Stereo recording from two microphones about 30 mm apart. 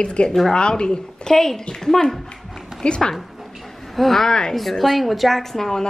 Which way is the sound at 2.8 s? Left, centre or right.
Left.